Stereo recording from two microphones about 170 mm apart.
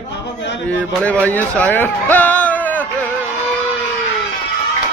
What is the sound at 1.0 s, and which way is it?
Speech, 10° left (ahead or behind).